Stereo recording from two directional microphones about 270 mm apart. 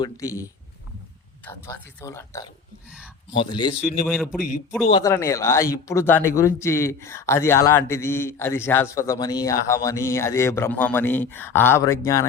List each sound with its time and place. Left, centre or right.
0.0 s speech: centre
1.5 s speech: centre
4.0 s a man's voice: centre
4.9 s speech: centre